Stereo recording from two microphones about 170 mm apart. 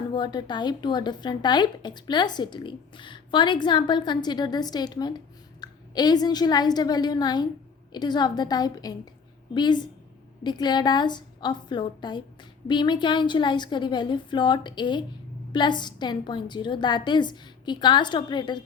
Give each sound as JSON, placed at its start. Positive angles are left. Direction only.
{"t": 0.1, "sound": "a woman's voice", "side_deg": 25}